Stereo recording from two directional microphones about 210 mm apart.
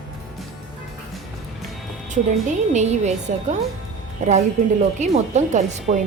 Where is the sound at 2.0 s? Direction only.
35° right (ahead or behind).